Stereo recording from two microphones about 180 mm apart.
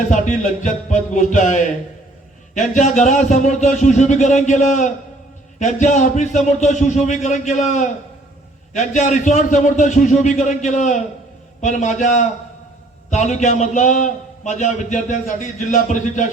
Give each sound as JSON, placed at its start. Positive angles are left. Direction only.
{"t": 0.1, "sound": "a man's voice", "side_deg": 40}